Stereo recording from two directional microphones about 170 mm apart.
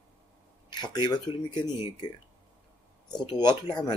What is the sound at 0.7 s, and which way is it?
Speech, 25° left (ahead or behind).